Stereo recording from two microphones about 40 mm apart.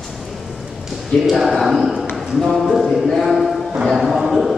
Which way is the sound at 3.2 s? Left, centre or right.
Centre.